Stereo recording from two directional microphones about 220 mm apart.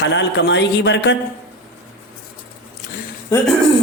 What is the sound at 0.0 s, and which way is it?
Speech, 55° left (ahead or behind).